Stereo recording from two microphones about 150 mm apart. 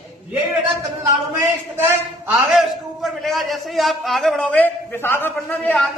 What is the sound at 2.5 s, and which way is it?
A man's voice, centre (ahead or behind).